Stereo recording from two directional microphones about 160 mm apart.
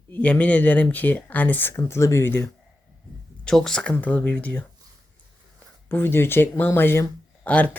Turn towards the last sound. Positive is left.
turn(degrees=10)  # may be behind; listen again after turning